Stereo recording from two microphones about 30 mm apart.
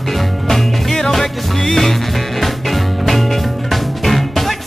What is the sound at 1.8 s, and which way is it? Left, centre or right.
Music, centre.